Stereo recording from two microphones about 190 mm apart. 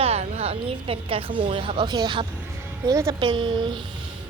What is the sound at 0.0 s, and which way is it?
A woman's voice, 35° right (ahead or behind).